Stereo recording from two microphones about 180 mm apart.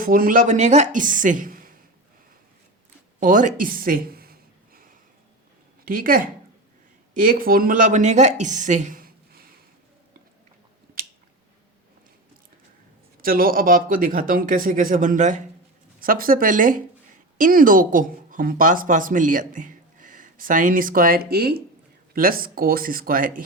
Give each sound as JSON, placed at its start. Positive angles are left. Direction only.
{"t": 0.0, "sound": "speech", "side_deg": -50}
{"t": 3.2, "sound": "a sound", "side_deg": -45}
{"t": 5.8, "sound": "speech", "side_deg": -50}
{"t": 13.2, "sound": "speech", "side_deg": -55}